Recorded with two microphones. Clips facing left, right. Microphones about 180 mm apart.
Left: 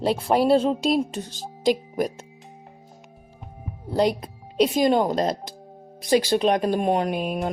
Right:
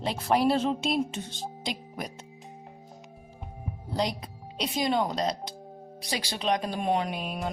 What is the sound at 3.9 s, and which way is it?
Speech, 50° left (ahead or behind).